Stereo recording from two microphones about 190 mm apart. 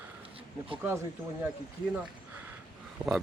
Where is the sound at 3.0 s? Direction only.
5° right (ahead or behind).